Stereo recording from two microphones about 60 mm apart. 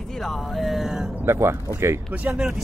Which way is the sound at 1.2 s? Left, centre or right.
Right.